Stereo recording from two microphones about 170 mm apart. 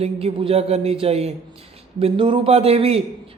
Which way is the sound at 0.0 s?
35° right (ahead or behind).